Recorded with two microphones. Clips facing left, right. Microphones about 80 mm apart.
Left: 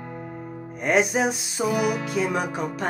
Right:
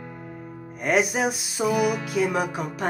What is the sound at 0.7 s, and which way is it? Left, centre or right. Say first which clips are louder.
Music: left 1 dB; centre.